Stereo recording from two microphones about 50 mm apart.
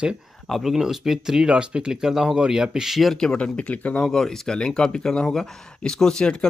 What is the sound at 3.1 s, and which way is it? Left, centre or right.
Speech, centre.